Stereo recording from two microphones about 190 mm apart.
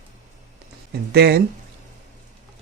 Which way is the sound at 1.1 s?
60° right (ahead or behind).